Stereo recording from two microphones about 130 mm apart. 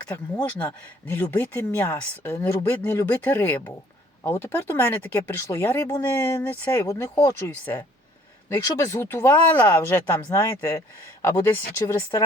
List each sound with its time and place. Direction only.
0.3 s speech: 10° left (ahead or behind)